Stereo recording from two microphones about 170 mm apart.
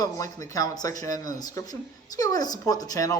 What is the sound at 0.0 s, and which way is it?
Speech, 20° left (ahead or behind).